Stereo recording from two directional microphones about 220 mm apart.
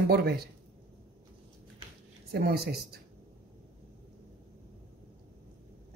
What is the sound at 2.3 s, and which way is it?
Speech, 45° right (ahead or behind).